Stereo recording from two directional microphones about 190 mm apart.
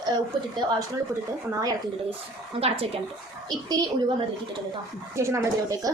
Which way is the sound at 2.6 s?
30° right (ahead or behind).